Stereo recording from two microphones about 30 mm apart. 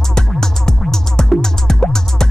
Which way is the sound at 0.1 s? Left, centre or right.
Centre.